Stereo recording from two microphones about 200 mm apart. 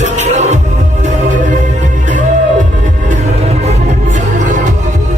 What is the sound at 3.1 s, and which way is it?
Music, 35° right (ahead or behind).